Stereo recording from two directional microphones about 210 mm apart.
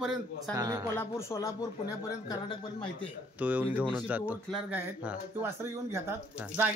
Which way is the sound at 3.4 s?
10° right (ahead or behind).